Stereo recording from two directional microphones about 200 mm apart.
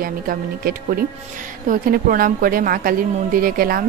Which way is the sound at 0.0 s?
45° right (ahead or behind).